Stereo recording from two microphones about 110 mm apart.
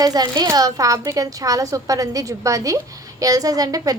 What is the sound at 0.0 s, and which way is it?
A woman's voice, 35° right (ahead or behind).